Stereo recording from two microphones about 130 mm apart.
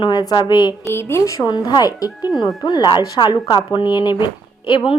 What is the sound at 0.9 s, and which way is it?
Speech, 20° left (ahead or behind).